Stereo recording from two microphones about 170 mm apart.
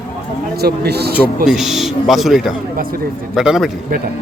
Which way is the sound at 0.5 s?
70° right (ahead or behind).